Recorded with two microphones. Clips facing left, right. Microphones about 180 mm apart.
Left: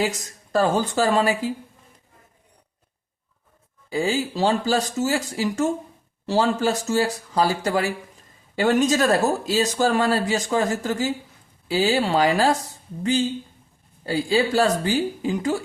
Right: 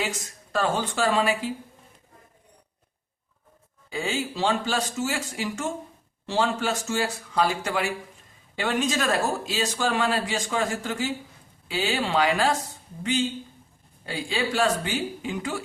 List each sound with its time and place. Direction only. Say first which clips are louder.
0.5 s speech: left 5 dB; 40° left (ahead or behind)
3.8 s speech: left 6 dB; 35° left (ahead or behind)